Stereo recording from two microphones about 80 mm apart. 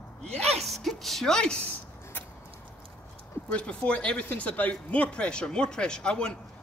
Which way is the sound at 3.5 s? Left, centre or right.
Centre.